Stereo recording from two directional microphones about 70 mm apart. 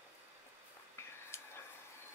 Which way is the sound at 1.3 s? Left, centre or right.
Left.